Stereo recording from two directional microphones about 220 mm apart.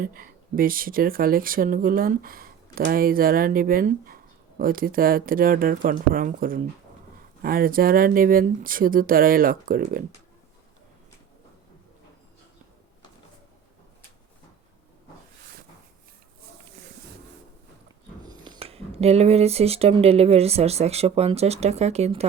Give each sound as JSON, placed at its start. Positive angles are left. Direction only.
{"t": 0.0, "sound": "speech", "side_deg": -40}
{"t": 18.2, "sound": "speech", "side_deg": -20}